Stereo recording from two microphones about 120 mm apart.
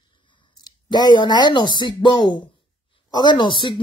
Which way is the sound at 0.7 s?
35° left (ahead or behind).